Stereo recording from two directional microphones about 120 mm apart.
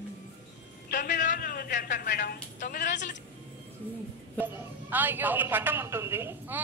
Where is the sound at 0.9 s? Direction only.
90° left.